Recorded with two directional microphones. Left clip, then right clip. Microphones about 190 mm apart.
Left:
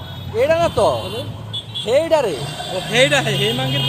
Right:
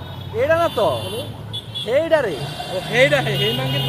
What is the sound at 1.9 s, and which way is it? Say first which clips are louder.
Speech: left 2 dB; 10° left (ahead or behind).